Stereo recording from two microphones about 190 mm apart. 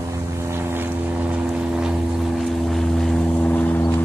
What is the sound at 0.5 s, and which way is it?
Vehicle, 10° right (ahead or behind).